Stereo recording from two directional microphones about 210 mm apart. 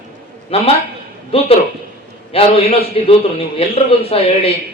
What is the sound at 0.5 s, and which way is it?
A man's voice, 25° left (ahead or behind).